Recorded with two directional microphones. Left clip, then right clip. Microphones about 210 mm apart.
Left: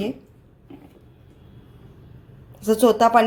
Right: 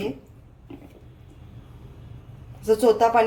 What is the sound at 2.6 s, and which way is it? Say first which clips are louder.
Speech: left 2 dB; 35° left (ahead or behind).